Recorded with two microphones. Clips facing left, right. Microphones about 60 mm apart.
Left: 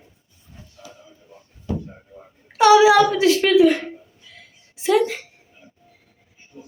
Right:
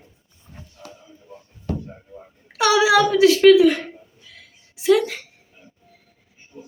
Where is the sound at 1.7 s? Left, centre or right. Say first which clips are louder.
Left 1 dB; right.